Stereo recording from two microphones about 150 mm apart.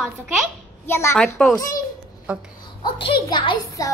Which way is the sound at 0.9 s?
20° left (ahead or behind).